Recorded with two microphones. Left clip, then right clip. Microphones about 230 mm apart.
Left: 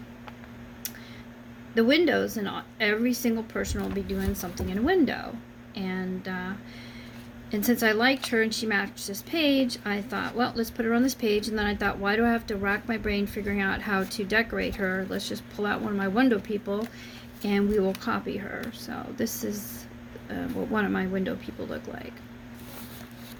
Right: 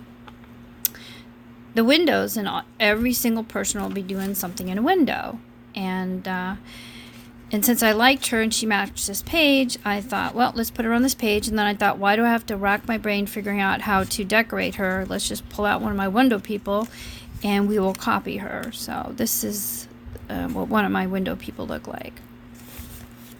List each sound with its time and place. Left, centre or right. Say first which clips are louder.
1.7 s speech: right 4 dB; right
7.5 s speech: right 4 dB; right
19.4 s speech: right 4 dB; right
20.3 s speech: right 6 dB; right